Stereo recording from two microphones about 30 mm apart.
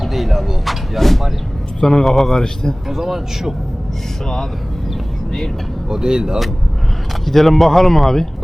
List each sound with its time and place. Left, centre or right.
0.0 s speech: centre
1.8 s a man's voice: left
2.0 s speech: centre
2.9 s speech: centre
5.9 s speech: right
7.3 s speech: centre